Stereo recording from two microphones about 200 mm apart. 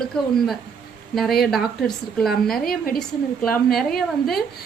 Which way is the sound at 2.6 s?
50° left (ahead or behind).